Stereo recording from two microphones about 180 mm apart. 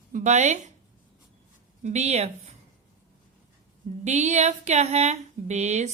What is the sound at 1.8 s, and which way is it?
Speech, 40° right (ahead or behind).